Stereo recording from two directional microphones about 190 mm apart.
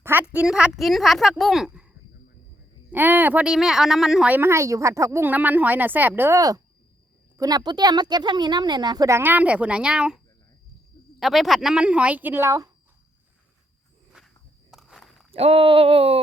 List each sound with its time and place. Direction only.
0.0 s a woman's voice: 10° right (ahead or behind)
2.9 s speech: 10° right (ahead or behind)
11.2 s a woman's voice: centre (ahead or behind)
14.7 s walk: centre (ahead or behind)
15.3 s speech: 30° right (ahead or behind)